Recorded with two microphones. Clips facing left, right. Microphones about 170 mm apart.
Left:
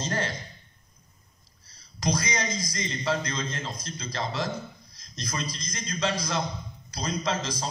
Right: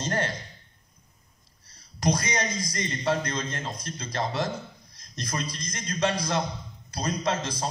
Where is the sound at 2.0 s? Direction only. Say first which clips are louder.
Right 2 dB; 60° right (ahead or behind).